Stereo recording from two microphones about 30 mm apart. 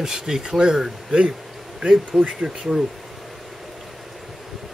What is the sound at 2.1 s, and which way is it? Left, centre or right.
Speech, centre.